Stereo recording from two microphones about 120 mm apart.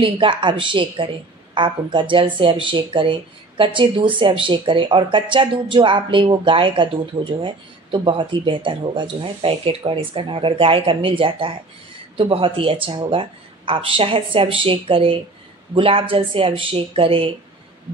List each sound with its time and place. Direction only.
0.0 s a woman's voice: 45° right (ahead or behind)